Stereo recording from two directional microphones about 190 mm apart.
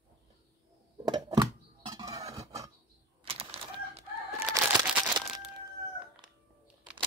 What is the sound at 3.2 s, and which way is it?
Chicken, 30° right (ahead or behind).